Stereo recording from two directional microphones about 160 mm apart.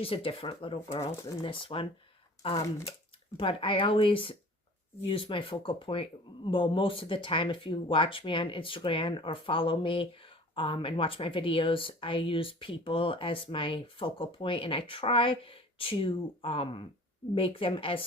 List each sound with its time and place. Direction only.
0.0 s speech: 35° left (ahead or behind)